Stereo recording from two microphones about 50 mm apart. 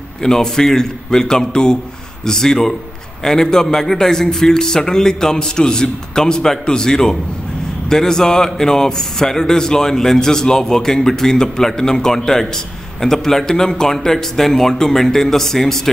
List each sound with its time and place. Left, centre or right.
0.2 s a man's voice: centre